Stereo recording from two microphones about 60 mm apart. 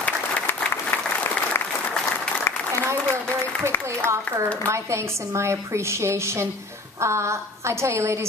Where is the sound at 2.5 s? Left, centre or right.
Left.